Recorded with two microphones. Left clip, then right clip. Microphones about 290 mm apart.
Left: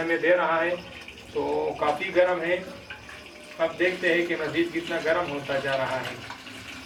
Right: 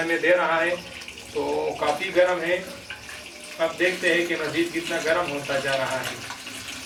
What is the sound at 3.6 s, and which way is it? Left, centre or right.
Speech, centre.